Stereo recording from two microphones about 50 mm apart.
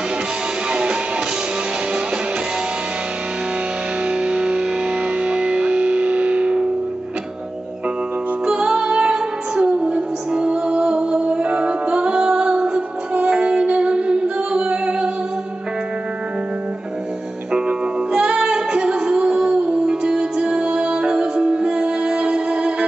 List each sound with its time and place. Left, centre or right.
0.7 s music: centre
4.1 s music: centre
8.5 s music: centre
17.5 s music: centre